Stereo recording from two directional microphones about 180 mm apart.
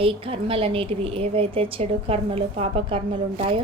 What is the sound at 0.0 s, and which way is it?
A woman's voice, 30° right (ahead or behind).